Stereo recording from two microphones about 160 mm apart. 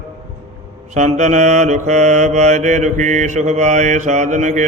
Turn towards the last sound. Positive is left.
turn(degrees=-50)  # may be behind; listen again after turning